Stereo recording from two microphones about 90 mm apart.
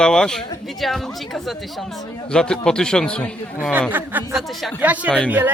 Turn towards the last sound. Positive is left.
turn(degrees=15)  # may be behind; listen again after turning